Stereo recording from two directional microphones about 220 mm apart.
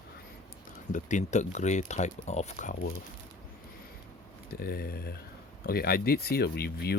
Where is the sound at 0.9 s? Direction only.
35° left (ahead or behind).